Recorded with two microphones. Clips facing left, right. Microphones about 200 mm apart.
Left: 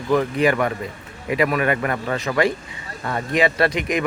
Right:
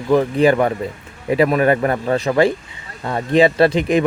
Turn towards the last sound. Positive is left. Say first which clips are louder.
# right 6 dB
turn(degrees=-30)  # may be behind; listen again after turning